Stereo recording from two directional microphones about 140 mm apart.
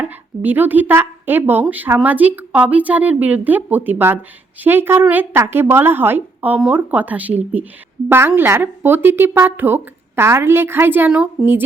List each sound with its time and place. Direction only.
0.0 s speech: 15° right (ahead or behind)